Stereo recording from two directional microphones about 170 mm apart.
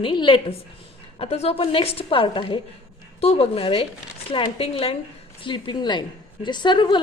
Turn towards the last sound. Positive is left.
turn(degrees=25)  # may be behind; listen again after turning